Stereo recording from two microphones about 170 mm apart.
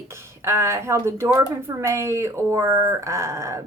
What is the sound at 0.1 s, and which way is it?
A woman's voice, 15° right (ahead or behind).